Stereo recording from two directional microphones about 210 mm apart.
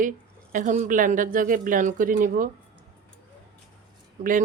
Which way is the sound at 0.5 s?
35° right (ahead or behind).